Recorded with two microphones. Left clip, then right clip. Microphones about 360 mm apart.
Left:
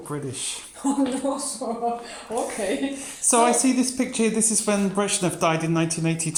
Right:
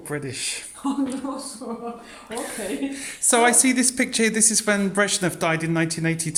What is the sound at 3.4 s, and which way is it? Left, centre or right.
Speech, right.